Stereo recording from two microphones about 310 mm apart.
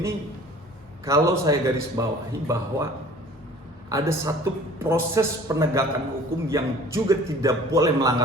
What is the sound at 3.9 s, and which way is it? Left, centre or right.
A man's voice, centre.